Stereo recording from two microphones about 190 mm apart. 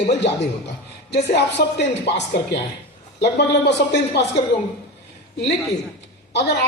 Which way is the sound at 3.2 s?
65° left (ahead or behind).